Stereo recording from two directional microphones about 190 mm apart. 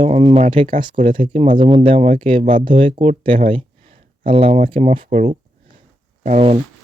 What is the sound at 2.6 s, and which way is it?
Speech, 25° right (ahead or behind).